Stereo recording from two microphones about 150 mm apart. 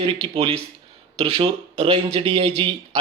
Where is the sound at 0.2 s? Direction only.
40° right (ahead or behind).